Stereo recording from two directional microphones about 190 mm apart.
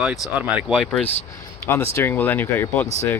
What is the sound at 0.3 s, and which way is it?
Speech, 5° right (ahead or behind).